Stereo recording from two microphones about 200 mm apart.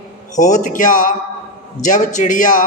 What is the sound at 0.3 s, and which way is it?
A woman's voice, 40° left (ahead or behind).